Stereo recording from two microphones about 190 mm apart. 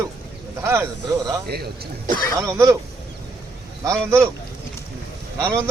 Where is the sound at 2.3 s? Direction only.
20° right (ahead or behind).